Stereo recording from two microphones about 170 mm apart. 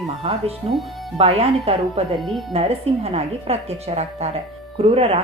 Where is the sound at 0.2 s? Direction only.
35° right (ahead or behind).